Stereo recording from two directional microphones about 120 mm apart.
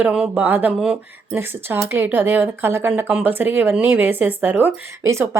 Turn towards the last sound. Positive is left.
turn(degrees=-20)  # may be behind; listen again after turning